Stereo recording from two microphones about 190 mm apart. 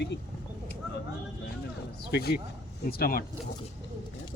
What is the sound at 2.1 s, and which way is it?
Speech, 55° left (ahead or behind).